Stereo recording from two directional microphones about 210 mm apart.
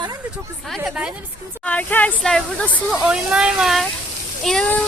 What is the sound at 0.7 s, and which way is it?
Speech, 5° right (ahead or behind).